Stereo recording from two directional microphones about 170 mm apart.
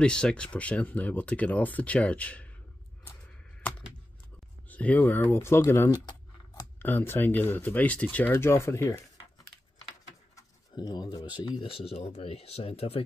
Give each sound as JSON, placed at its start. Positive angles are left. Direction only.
{"t": 0.0, "sound": "speech", "side_deg": 5}
{"t": 4.6, "sound": "speech", "side_deg": 10}
{"t": 6.8, "sound": "speech", "side_deg": 15}